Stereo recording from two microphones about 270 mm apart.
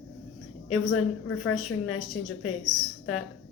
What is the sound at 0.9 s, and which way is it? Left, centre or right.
Speech, left.